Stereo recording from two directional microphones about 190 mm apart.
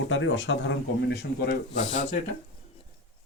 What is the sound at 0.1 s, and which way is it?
Speech, 80° left.